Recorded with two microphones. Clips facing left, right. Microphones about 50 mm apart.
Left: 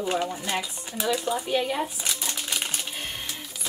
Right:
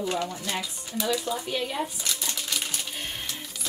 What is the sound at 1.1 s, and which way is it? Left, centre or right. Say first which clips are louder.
Typewriter: left 4 dB; centre.